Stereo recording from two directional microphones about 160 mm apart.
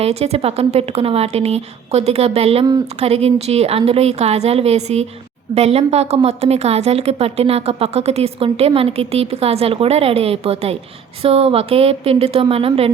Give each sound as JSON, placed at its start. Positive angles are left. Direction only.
{"t": 0.0, "sound": "a woman's voice", "side_deg": -40}